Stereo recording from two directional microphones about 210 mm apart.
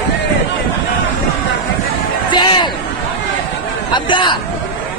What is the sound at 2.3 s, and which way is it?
Music, 20° left (ahead or behind).